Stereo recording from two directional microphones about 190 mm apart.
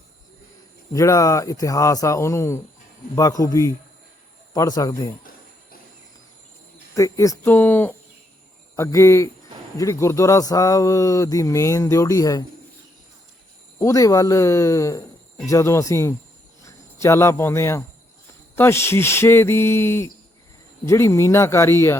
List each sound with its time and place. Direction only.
0.9 s speech: 15° left (ahead or behind)
6.9 s speech: 15° left (ahead or behind)
13.7 s speech: 15° left (ahead or behind)